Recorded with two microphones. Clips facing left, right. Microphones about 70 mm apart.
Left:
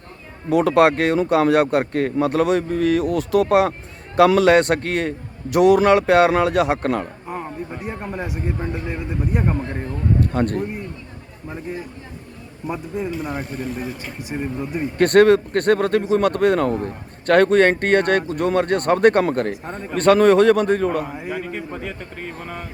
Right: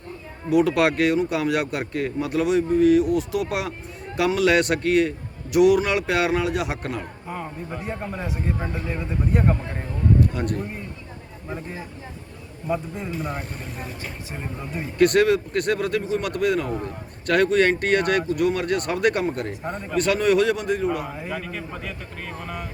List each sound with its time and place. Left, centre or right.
0.5 s a man's voice: left
7.9 s a man's voice: centre
10.2 s a sound: left
11.4 s a man's voice: centre
13.0 s a man's voice: centre
14.9 s a man's voice: left